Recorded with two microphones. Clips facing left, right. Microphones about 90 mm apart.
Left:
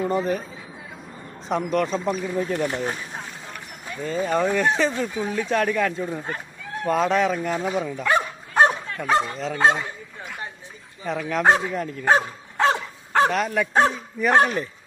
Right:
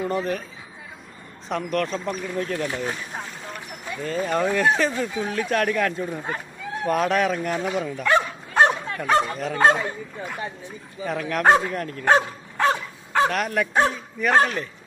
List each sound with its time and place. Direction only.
0.0 s speech: centre (ahead or behind)
1.5 s speech: 5° left (ahead or behind)
3.9 s speech: 5° left (ahead or behind)
8.0 s dog: 20° left (ahead or behind)
9.0 s speech: 5° right (ahead or behind)
11.0 s speech: centre (ahead or behind)
12.5 s dog: 20° left (ahead or behind)
13.3 s speech: centre (ahead or behind)
14.3 s speech: 10° left (ahead or behind)